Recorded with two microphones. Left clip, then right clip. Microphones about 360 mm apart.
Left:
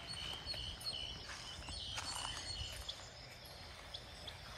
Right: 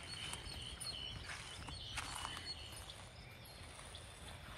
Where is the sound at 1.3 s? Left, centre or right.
Centre.